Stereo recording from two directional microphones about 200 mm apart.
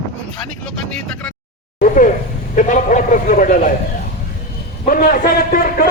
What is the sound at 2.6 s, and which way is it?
A man's voice, 40° left (ahead or behind).